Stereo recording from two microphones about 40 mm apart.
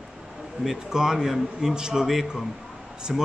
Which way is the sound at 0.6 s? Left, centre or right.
Centre.